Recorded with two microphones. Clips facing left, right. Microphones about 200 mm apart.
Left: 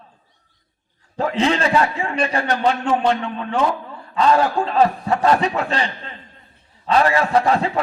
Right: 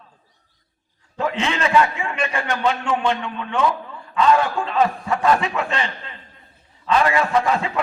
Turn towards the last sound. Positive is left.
turn(degrees=35)  # may be behind; listen again after turning